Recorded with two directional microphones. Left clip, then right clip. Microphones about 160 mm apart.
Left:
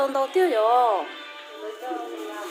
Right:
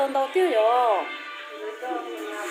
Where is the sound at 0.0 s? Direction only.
20° left (ahead or behind).